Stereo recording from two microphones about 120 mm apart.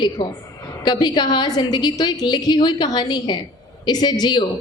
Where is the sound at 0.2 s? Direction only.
40° left (ahead or behind).